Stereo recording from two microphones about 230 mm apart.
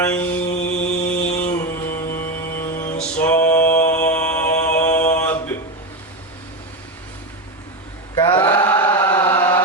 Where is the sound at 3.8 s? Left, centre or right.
Centre.